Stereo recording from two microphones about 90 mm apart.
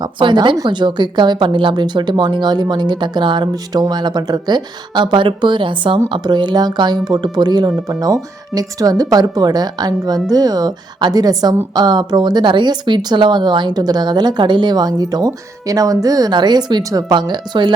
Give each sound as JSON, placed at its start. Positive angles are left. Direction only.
{"t": 0.2, "sound": "speech", "side_deg": -65}
{"t": 6.2, "sound": "a woman's voice", "side_deg": -55}